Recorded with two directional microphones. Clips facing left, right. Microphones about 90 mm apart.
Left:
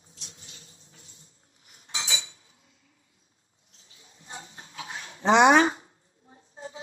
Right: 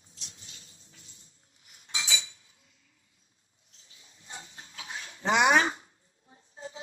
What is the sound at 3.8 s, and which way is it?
Dog, 35° left (ahead or behind).